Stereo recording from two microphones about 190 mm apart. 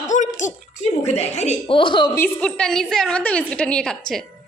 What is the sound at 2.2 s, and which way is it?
A woman's voice, 5° left (ahead or behind).